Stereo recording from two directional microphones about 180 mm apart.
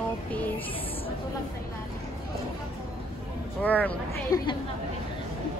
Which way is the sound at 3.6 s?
10° left (ahead or behind).